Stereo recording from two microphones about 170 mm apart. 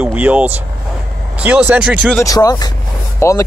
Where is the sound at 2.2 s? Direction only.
20° left (ahead or behind).